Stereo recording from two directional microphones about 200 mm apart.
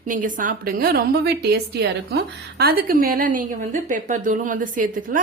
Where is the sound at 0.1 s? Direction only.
40° right (ahead or behind).